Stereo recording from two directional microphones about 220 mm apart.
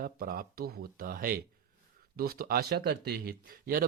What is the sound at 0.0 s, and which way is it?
Speech, 40° right (ahead or behind).